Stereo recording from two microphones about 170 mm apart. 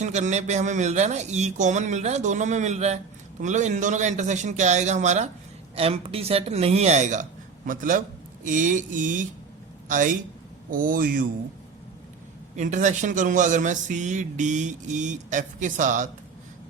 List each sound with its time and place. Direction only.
0.0 s a man's voice: 45° right (ahead or behind)
12.5 s a man's voice: 45° right (ahead or behind)